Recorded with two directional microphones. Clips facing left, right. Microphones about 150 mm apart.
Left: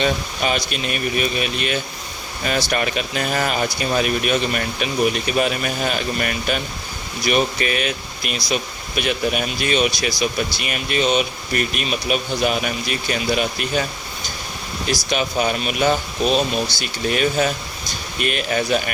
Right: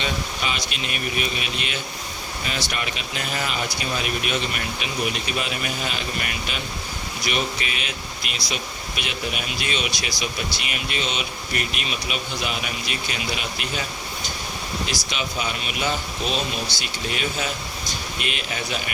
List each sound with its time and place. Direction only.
0.0 s speech: 45° left (ahead or behind)
14.8 s speech: 50° left (ahead or behind)